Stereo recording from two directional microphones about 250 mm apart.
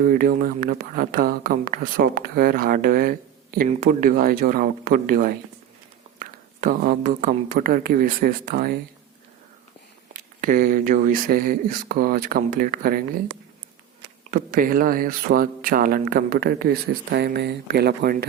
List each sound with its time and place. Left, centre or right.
0.0 s speech: right
6.6 s speech: right
10.1 s speech: right
14.3 s speech: right